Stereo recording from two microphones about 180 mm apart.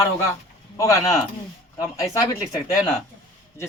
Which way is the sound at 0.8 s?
20° left (ahead or behind).